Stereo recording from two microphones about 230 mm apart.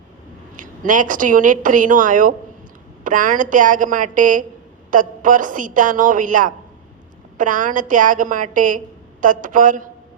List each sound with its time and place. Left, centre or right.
0.5 s a woman's voice: right